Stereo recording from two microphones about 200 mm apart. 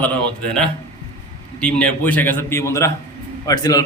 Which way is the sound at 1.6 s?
5° left (ahead or behind).